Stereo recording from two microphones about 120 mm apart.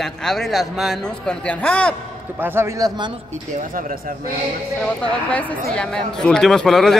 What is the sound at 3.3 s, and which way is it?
Speech, 90° right.